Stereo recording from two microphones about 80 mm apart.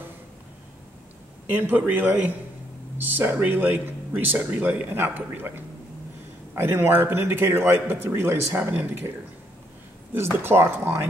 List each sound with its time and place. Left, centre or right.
1.5 s a man's voice: right
6.5 s a man's voice: right
10.1 s speech: right